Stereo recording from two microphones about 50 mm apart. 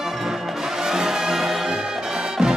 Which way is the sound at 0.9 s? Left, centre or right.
Centre.